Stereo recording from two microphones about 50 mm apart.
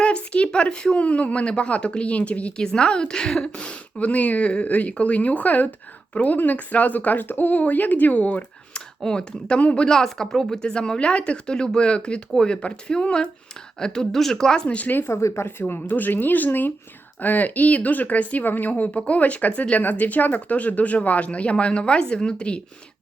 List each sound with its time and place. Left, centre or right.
0.0 s speech: left
9.9 s speech: centre
14.8 s speech: left
15.1 s speech: left
15.4 s speech: left
15.9 s speech: left
18.8 s speech: left